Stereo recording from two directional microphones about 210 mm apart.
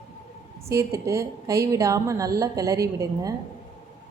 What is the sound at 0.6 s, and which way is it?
A woman's voice, 15° right (ahead or behind).